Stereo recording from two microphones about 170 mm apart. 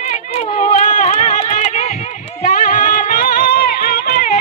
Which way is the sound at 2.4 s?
50° left (ahead or behind).